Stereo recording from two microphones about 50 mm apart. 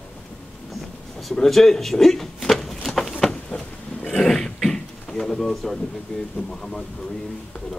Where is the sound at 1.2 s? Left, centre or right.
Centre.